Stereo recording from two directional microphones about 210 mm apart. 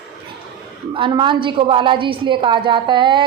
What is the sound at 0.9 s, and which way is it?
A woman's voice, 25° right (ahead or behind).